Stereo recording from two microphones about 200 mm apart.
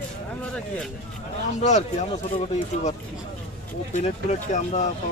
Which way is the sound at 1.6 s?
35° left (ahead or behind).